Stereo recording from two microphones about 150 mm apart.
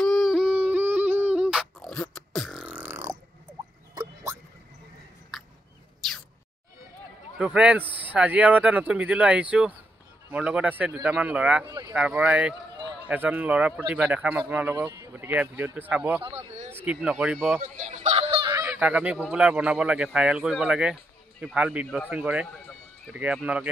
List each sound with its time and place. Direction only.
0.0 s a sound: centre (ahead or behind); by 4.4 s 25° right (ahead or behind)
6.0 s a sound: centre (ahead or behind)
7.3 s speech: 5° right (ahead or behind)
11.6 s a sound: 30° right (ahead or behind)
11.9 s speech: 10° right (ahead or behind)
16.2 s speech: 35° right (ahead or behind)
16.7 s speech: 10° right (ahead or behind)
17.6 s a sound: 50° right (ahead or behind)
18.5 s honk: 20° right (ahead or behind)
19.2 s speech: 5° right (ahead or behind)
21.8 s speech: 10° left (ahead or behind)
22.1 s speech: 10° right (ahead or behind)